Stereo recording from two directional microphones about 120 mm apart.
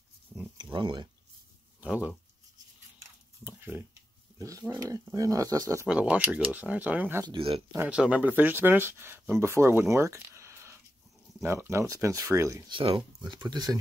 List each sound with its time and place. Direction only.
0.7 s speech: 40° right (ahead or behind)
1.8 s a sound: 10° right (ahead or behind); by 5.9 s 25° right (ahead or behind)
5.9 s speech: 10° right (ahead or behind)
7.2 s speech: 50° right (ahead or behind)
7.9 s speech: 10° right (ahead or behind)
12.6 s speech: 40° right (ahead or behind)